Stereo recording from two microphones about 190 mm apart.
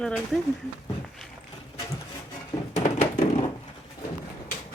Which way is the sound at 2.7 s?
35° left (ahead or behind).